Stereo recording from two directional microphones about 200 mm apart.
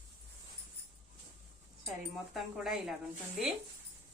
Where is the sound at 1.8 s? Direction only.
Centre (ahead or behind).